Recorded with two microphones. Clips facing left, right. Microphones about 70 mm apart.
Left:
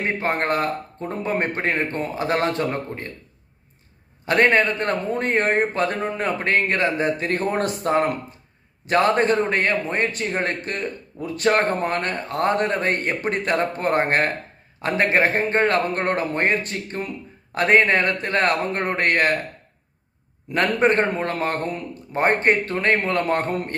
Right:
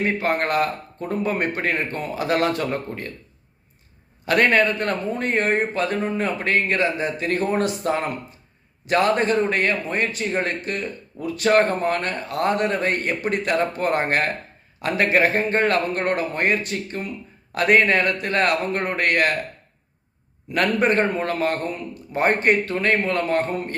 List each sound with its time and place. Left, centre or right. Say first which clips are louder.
0.0 s speech: right 1 dB; left
4.3 s a man's voice: even; left
20.5 s speech: left 1 dB; left